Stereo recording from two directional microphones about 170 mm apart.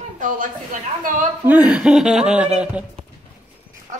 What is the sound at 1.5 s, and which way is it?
A woman's voice, 10° right (ahead or behind).